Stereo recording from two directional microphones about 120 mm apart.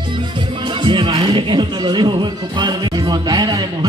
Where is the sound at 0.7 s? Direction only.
40° right (ahead or behind).